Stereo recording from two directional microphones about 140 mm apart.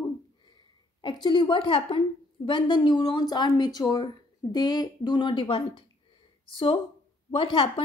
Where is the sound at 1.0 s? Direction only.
35° left (ahead or behind).